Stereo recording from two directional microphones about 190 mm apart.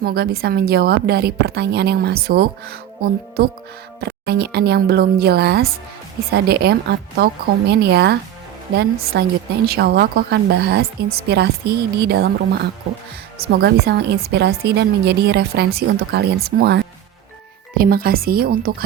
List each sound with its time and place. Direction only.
0.0 s a woman's voice: 55° right (ahead or behind)